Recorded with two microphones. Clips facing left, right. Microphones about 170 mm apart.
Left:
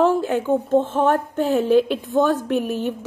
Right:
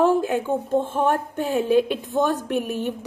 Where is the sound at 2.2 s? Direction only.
15° right (ahead or behind).